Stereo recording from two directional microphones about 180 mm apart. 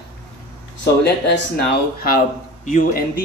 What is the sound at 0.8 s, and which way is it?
Speech, 70° left (ahead or behind).